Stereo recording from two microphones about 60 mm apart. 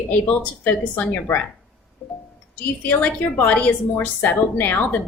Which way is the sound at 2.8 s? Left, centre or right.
Left.